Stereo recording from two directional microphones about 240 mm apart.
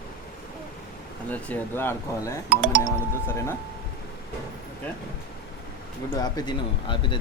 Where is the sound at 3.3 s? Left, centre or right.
Centre.